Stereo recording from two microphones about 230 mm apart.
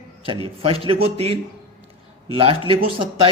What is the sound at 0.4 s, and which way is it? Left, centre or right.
Speech, right.